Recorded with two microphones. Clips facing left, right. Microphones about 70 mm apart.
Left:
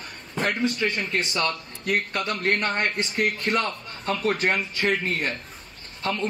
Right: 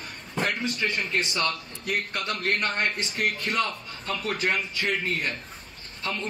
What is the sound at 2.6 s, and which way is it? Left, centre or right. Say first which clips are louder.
A man's voice: left 2 dB; left.